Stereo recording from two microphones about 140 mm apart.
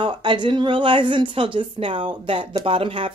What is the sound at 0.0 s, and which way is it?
Speech, 35° right (ahead or behind).